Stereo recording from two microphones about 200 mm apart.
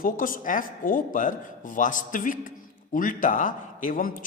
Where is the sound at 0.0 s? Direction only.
45° left (ahead or behind).